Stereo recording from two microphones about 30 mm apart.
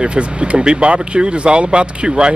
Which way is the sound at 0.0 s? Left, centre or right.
Right.